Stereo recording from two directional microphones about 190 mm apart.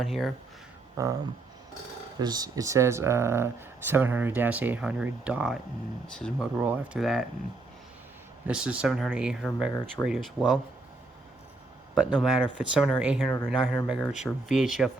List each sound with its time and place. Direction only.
0.0 s speech: centre (ahead or behind)
1.0 s speech: 15° right (ahead or behind)
2.1 s speech: 20° right (ahead or behind); by 6.5 s 5° left (ahead or behind)
6.6 s speech: 5° right (ahead or behind)
8.4 s speech: 5° right (ahead or behind)
12.1 s speech: 5° right (ahead or behind)